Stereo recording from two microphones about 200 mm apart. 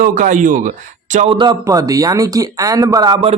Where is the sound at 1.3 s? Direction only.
20° right (ahead or behind).